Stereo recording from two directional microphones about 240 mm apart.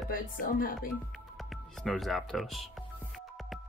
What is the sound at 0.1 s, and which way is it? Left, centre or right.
Speech, left.